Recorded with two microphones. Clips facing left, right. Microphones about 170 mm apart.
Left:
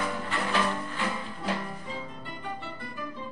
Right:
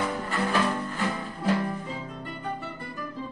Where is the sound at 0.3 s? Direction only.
45° right (ahead or behind).